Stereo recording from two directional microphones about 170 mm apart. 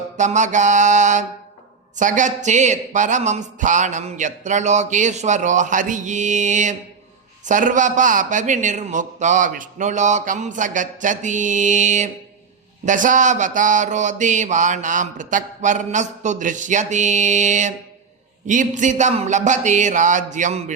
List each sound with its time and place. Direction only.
0.2 s mantra: 45° right (ahead or behind)